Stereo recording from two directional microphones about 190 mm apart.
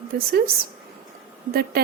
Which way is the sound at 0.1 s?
50° right (ahead or behind).